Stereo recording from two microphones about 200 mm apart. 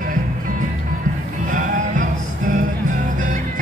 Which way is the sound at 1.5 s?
40° right (ahead or behind).